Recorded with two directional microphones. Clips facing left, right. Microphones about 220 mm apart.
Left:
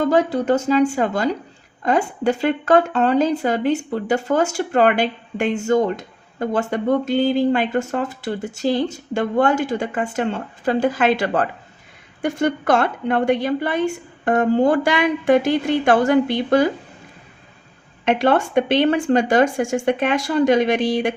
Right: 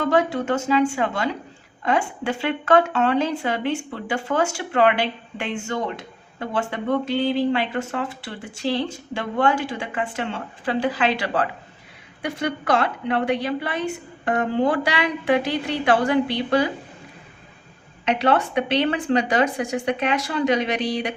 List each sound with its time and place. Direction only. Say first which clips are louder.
0.0 s speech: left 3 dB; 40° left (ahead or behind)
18.2 s speech: left 3 dB; 45° left (ahead or behind)